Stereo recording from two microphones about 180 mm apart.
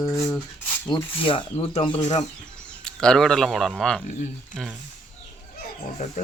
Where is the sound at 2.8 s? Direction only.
5° left (ahead or behind).